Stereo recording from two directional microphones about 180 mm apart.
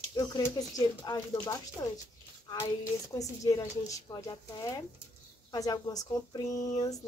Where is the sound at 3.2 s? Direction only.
20° left (ahead or behind).